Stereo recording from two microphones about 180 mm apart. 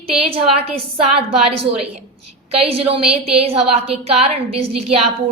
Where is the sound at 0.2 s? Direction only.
35° right (ahead or behind).